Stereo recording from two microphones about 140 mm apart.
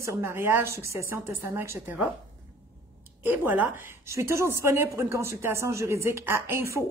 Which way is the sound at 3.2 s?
15° right (ahead or behind).